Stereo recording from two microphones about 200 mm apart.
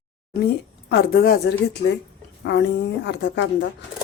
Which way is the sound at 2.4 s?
60° left (ahead or behind).